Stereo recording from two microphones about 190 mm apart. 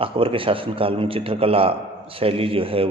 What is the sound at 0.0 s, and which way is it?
A man's voice, 30° right (ahead or behind).